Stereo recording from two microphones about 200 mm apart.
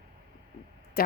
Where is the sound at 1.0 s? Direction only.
50° left (ahead or behind).